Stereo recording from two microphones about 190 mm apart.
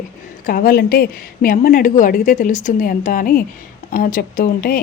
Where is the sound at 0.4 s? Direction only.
50° left (ahead or behind).